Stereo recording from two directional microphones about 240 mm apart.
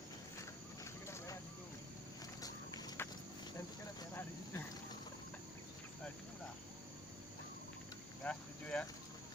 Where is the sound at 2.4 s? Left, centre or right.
Centre.